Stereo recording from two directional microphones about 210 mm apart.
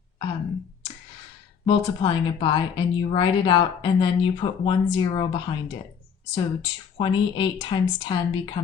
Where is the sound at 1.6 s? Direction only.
20° left (ahead or behind).